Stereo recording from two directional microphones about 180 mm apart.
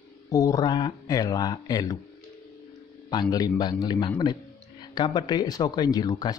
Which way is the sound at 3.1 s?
20° left (ahead or behind).